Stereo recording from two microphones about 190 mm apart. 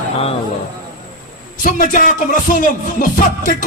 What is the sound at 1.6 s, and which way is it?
A man's voice, 45° left (ahead or behind).